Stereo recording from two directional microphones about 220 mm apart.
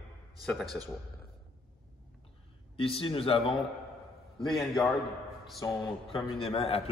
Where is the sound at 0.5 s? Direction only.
Centre (ahead or behind).